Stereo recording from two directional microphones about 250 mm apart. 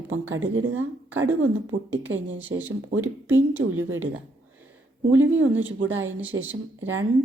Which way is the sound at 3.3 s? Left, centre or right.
Right.